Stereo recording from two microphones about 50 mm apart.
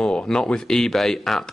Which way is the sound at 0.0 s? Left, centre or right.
Left.